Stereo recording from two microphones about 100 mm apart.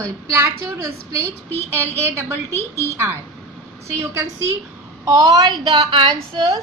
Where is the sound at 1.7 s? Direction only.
25° right (ahead or behind).